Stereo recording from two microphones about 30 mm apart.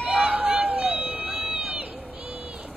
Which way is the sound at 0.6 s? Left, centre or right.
Right.